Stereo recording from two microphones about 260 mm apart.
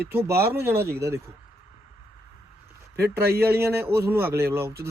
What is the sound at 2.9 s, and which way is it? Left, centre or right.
Speech, right.